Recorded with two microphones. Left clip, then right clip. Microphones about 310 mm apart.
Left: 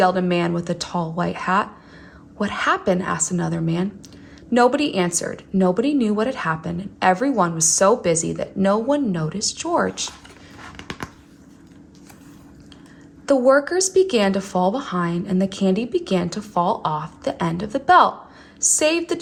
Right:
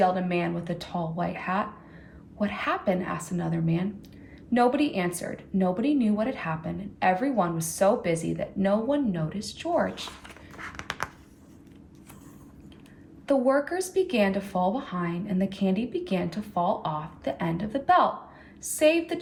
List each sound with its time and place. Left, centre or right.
0.0 s speech: left
10.8 s a sound: centre
13.2 s speech: left